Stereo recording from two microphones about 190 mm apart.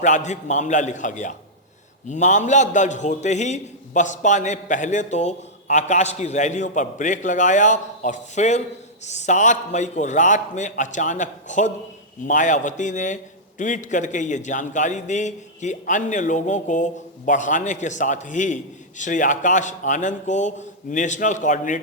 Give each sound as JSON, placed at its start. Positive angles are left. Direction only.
{"t": 0.0, "sound": "a man's voice", "side_deg": 40}